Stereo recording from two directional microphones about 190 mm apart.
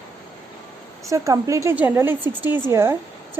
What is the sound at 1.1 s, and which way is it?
A woman's voice, 15° right (ahead or behind).